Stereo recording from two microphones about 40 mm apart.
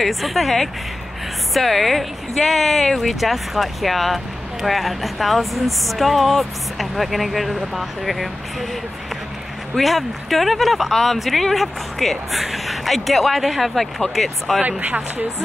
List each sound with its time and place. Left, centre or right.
0.0 s speech: centre
9.8 s speech: centre
14.8 s speech: right